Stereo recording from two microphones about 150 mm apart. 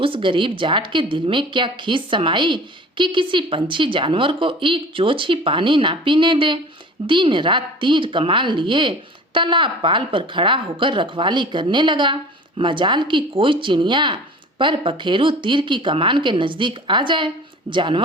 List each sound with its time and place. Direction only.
0.0 s a woman's voice: 35° right (ahead or behind)